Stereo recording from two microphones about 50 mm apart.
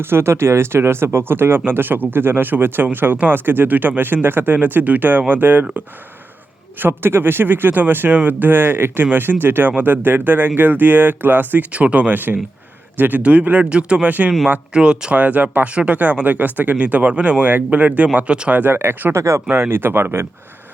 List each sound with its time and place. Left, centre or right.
0.0 s speech: right
6.7 s speech: right
11.7 s speech: right
13.7 s speech: right
15.2 s speech: right
15.7 s speech: right
16.2 s speech: right
18.5 s speech: right
19.1 s speech: right
19.7 s speech: right